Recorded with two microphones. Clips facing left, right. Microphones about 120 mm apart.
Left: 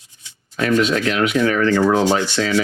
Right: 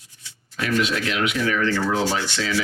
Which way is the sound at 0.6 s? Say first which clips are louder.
Left 6 dB; 50° left (ahead or behind).